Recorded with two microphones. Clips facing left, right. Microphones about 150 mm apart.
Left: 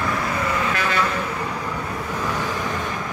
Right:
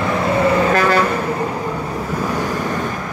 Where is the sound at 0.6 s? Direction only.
45° right (ahead or behind).